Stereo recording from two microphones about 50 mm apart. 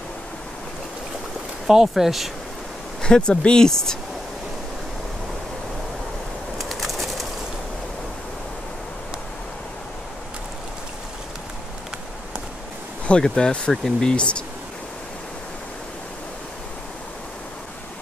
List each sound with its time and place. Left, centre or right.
1.7 s speech: centre
3.0 s speech: centre
6.6 s bird: centre
13.2 s speech: centre